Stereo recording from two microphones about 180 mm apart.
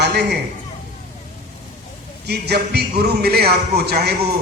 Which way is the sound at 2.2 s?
65° right (ahead or behind).